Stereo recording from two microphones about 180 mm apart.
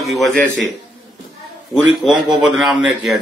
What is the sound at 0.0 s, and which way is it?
Speech, centre (ahead or behind).